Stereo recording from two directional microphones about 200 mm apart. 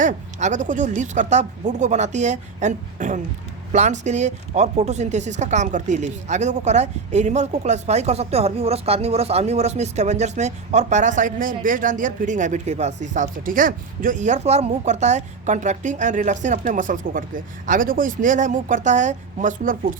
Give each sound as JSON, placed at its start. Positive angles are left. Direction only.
{"t": 0.0, "sound": "speech", "side_deg": -35}